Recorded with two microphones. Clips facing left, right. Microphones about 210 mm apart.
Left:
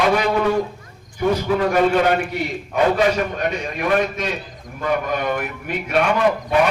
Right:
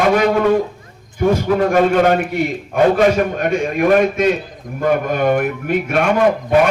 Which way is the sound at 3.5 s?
50° right (ahead or behind).